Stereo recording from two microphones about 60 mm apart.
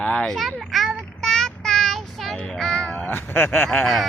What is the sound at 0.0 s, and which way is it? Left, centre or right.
Speech, centre.